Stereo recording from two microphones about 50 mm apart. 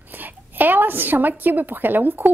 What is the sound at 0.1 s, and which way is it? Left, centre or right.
A woman's voice, right.